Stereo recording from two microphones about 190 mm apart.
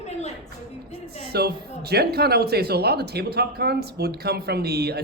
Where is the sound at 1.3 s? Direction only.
55° right (ahead or behind).